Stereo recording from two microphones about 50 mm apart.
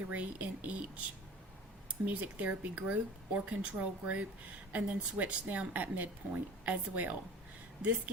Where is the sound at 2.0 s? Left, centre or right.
Right.